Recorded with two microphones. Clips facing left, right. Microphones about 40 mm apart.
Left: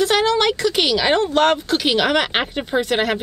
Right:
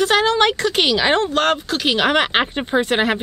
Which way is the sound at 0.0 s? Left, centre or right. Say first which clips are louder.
Right 1 dB; right.